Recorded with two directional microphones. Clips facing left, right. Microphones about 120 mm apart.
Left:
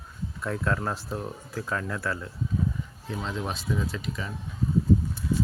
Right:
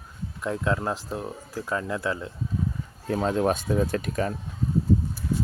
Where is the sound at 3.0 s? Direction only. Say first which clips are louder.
Right 10 dB; 50° right (ahead or behind).